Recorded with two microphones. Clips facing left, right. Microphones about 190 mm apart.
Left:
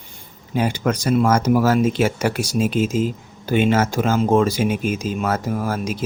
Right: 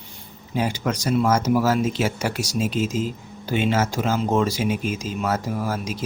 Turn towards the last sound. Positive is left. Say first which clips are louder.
# left 3 dB
turn(degrees=55)  # may be behind; listen again after turning